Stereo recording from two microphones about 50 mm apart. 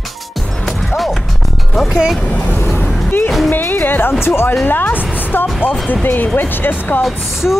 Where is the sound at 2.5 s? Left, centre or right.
Left.